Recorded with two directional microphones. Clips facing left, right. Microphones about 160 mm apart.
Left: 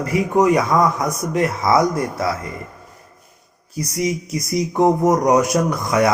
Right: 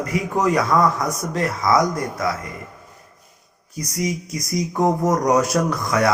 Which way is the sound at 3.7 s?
25° left (ahead or behind).